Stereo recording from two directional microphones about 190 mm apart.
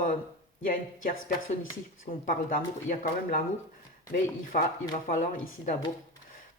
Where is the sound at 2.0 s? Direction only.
45° left (ahead or behind).